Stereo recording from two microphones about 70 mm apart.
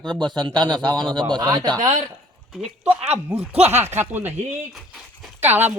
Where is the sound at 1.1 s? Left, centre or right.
Right.